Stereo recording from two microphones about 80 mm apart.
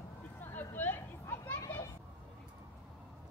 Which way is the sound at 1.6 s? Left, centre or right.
Left.